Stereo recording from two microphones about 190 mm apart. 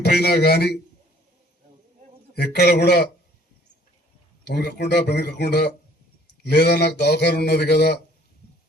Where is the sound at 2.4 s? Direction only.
60° left (ahead or behind).